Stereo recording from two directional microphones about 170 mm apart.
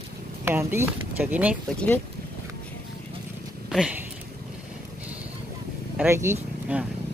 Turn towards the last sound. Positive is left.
turn(degrees=-10)  # may be behind; listen again after turning